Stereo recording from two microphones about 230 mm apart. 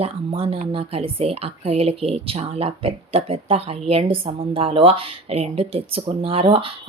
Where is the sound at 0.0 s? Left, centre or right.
Right.